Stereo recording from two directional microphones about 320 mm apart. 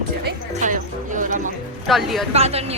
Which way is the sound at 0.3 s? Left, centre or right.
Right.